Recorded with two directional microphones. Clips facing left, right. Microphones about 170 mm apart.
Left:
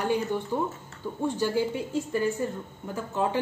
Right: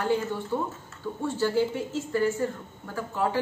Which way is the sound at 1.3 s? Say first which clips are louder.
Right 4 dB; 15° left (ahead or behind).